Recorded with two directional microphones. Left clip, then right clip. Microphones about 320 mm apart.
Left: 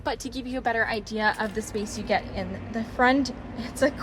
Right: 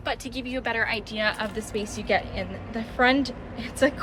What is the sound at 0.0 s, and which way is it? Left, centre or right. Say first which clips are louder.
A woman's voice: even; centre.